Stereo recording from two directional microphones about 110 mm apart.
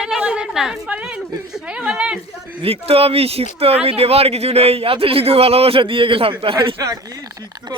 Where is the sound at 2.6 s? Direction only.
60° right (ahead or behind).